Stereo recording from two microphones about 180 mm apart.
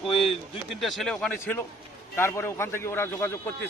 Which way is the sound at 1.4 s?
15° left (ahead or behind).